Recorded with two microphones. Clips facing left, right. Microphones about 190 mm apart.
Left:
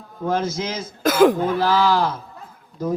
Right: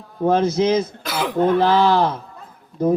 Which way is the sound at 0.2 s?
30° right (ahead or behind).